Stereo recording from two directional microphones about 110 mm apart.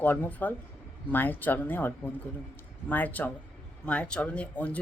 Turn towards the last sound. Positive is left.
turn(degrees=15)  # may be behind; listen again after turning